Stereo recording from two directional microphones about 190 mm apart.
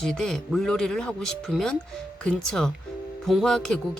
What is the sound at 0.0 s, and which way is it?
Speech, 5° left (ahead or behind).